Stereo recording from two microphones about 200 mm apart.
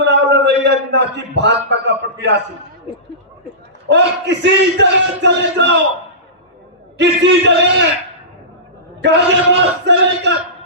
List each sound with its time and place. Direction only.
0.0 s a sound: 60° right (ahead or behind)
3.8 s speech: 60° right (ahead or behind)
6.9 s speech: 60° right (ahead or behind)
9.0 s speech: 60° right (ahead or behind)